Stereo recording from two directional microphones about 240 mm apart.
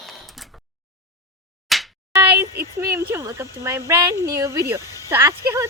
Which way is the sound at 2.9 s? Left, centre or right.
Centre.